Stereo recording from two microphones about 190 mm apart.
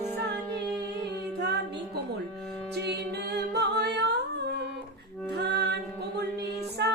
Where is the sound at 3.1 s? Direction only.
60° right (ahead or behind).